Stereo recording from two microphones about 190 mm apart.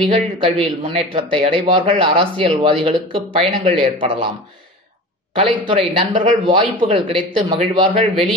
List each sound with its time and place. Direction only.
0.1 s a man's voice: 30° right (ahead or behind)
5.3 s a man's voice: 30° right (ahead or behind)